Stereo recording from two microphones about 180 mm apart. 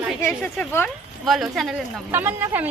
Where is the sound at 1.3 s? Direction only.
Centre (ahead or behind).